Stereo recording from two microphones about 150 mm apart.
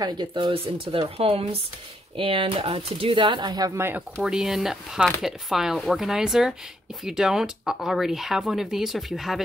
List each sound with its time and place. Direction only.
0.0 s speech: 30° right (ahead or behind)
4.2 s speech: 5° right (ahead or behind)